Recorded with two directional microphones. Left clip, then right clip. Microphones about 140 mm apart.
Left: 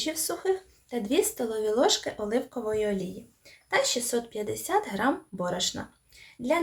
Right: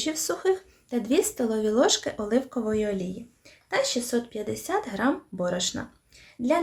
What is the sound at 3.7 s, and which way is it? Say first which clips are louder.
Speech: even; 20° right (ahead or behind).